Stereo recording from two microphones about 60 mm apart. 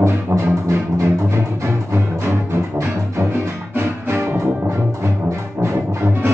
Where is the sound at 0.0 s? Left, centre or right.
Right.